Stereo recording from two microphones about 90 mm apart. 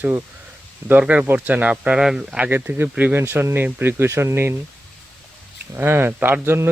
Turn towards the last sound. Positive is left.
turn(degrees=-30)  # may be behind; listen again after turning